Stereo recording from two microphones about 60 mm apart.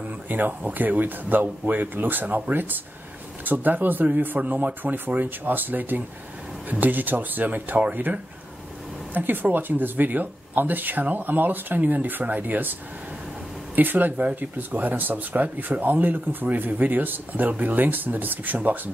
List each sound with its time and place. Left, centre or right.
0.3 s speech: right
13.7 s speech: right